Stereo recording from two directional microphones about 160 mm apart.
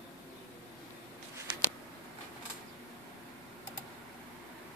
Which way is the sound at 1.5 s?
30° right (ahead or behind).